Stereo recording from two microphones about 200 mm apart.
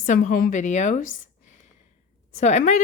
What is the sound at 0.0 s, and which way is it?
A woman's voice, 45° left (ahead or behind).